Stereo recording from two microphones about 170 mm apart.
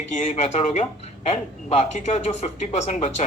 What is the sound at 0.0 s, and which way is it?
Speech, 40° left (ahead or behind).